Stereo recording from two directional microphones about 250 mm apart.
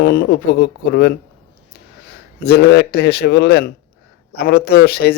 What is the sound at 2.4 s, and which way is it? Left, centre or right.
A man's voice, left.